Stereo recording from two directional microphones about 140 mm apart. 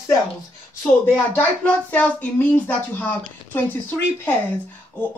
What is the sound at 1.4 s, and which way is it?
Speech, 10° left (ahead or behind).